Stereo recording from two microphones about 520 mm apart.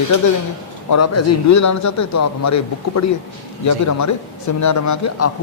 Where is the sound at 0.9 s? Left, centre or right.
Left.